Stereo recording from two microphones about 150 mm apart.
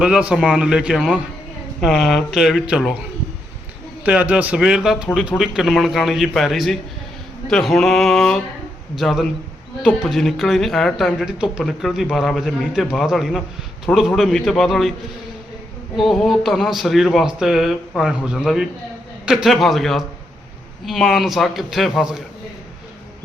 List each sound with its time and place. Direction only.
0.0 s speech: 5° right (ahead or behind)
4.0 s a man's voice: 10° right (ahead or behind)
7.4 s a sound: centre (ahead or behind)
9.0 s speech: centre (ahead or behind)
16.0 s speech: centre (ahead or behind)